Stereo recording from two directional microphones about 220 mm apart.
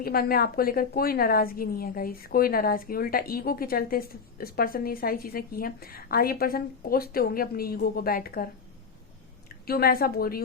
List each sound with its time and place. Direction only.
0.0 s a woman's voice: 45° left (ahead or behind)
9.6 s a woman's voice: 45° left (ahead or behind)